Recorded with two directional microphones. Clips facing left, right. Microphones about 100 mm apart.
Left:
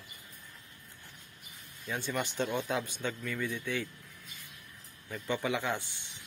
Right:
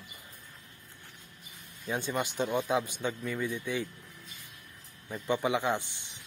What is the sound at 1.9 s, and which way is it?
Speech, 15° right (ahead or behind).